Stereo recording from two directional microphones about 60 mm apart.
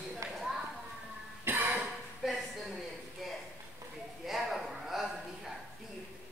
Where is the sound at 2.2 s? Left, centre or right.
Centre.